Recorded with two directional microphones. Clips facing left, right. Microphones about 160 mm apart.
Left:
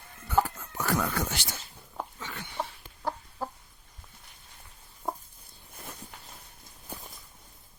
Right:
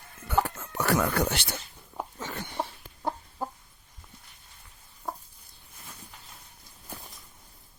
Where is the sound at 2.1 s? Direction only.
40° right (ahead or behind).